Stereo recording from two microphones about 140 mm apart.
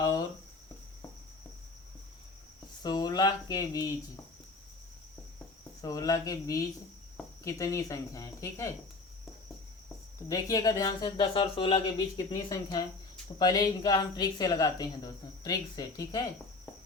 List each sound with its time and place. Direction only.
0.0 s a sound: 25° left (ahead or behind)
2.8 s speech: 30° left (ahead or behind)
5.8 s speech: 25° left (ahead or behind)
10.2 s speech: 25° left (ahead or behind)